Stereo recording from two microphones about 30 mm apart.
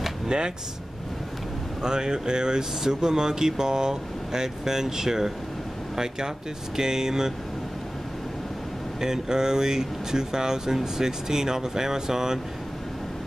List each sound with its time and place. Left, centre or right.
0.3 s speech: right
1.8 s speech: right
9.0 s speech: right